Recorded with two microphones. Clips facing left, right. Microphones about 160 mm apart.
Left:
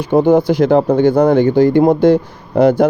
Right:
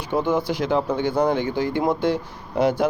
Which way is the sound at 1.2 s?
55° left (ahead or behind).